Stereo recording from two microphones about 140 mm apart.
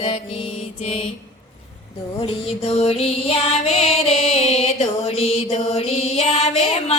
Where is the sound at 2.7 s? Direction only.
45° left (ahead or behind).